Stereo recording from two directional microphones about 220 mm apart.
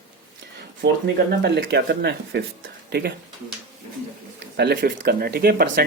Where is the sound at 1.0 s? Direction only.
50° right (ahead or behind).